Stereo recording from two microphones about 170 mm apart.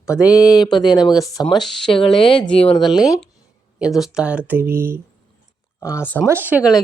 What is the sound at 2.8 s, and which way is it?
Speech, centre (ahead or behind).